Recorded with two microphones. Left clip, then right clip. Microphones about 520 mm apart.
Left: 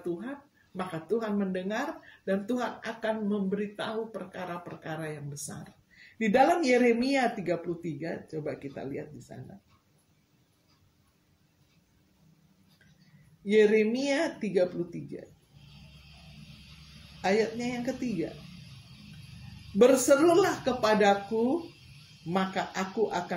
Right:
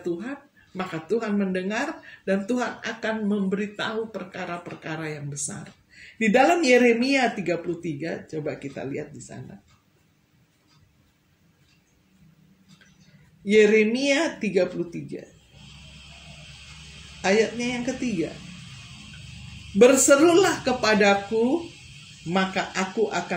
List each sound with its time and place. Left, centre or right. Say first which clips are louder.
0.7 s speech: right 5 dB; left
13.5 s speech: right 5 dB; left
17.2 s speech: right 6 dB; left
19.8 s speech: right 5 dB; left
22.3 s speech: right 5 dB; left